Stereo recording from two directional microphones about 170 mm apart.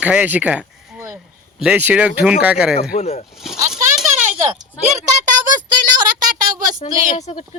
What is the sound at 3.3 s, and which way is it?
Speech, centre (ahead or behind).